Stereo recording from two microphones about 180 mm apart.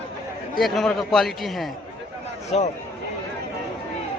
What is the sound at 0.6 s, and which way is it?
A man's voice, centre (ahead or behind).